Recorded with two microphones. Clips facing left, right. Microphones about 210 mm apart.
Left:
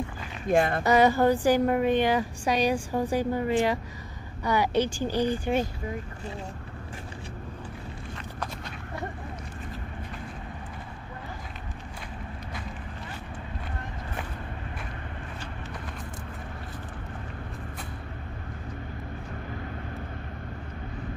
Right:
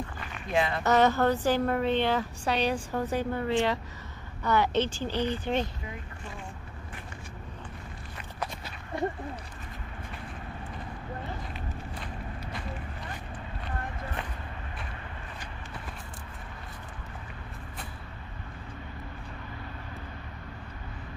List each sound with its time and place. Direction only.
0.5 s speech: 50° left (ahead or behind)
0.8 s a woman's voice: 10° left (ahead or behind)